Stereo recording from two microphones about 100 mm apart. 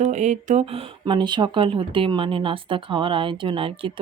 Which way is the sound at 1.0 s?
50° right (ahead or behind).